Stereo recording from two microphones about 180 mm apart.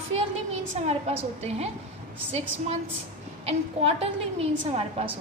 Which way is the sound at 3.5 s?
35° right (ahead or behind).